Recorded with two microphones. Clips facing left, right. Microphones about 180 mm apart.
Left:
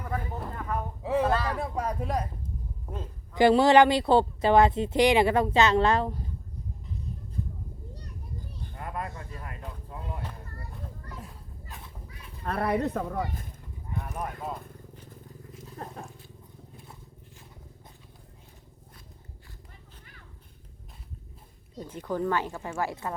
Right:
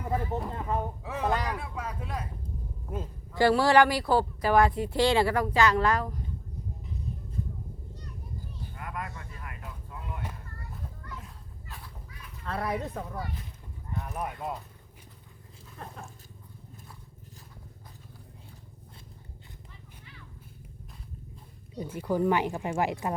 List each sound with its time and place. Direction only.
0.0 s speech: 20° right (ahead or behind)
1.5 s speech: 40° left (ahead or behind)
3.3 s speech: 20° left (ahead or behind)
8.7 s vehicle: 30° left (ahead or behind)
10.6 s children playing: 35° left (ahead or behind)
11.7 s a sound: 20° left (ahead or behind)
12.5 s speech: 60° left (ahead or behind)
14.0 s speech: 5° right (ahead or behind)
15.6 s wild animals: 35° left (ahead or behind)
21.8 s speech: 10° right (ahead or behind)